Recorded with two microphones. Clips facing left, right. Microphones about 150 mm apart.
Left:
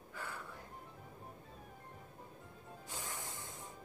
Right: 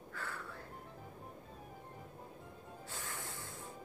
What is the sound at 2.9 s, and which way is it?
Music, 15° left (ahead or behind).